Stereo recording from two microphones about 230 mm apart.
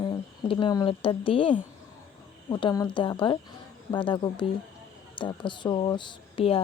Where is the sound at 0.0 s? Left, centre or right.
Left.